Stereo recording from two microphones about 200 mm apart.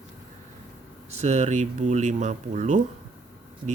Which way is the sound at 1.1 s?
35° right (ahead or behind).